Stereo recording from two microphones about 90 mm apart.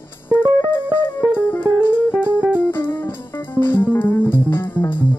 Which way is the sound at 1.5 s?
25° left (ahead or behind).